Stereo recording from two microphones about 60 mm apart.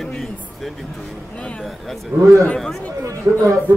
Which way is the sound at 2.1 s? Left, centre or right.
Right.